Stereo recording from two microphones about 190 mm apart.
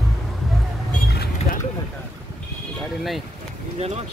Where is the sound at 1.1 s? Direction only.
55° left (ahead or behind).